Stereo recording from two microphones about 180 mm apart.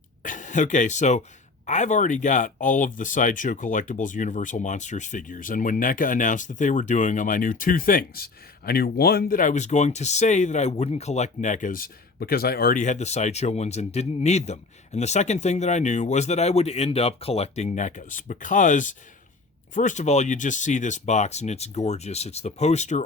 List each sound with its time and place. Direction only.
0.2 s speech: 45° left (ahead or behind)